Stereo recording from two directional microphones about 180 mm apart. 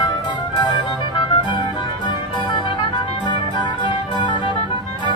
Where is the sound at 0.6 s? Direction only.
25° left (ahead or behind).